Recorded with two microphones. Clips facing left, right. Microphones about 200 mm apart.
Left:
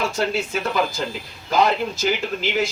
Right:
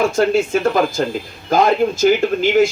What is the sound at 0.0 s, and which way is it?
Speech, 50° right (ahead or behind).